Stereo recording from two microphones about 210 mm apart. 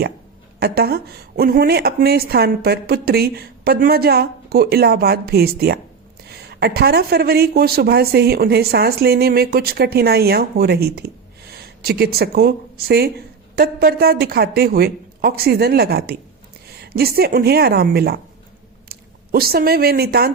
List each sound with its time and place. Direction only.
0.6 s speech: 50° right (ahead or behind)